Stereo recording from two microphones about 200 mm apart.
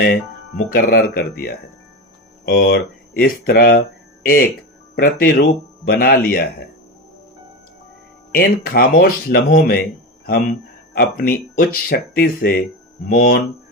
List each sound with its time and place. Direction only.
0.0 s speech: 50° left (ahead or behind)
8.3 s speech: 50° left (ahead or behind)
10.9 s speech: 50° left (ahead or behind)